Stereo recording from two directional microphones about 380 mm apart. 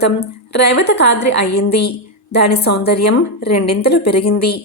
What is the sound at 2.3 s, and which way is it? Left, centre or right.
A woman's voice, left.